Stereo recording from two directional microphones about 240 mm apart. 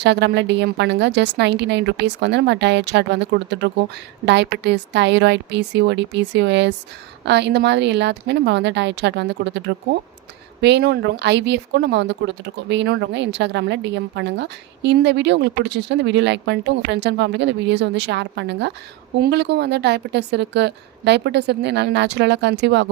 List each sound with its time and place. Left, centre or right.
0.0 s speech: right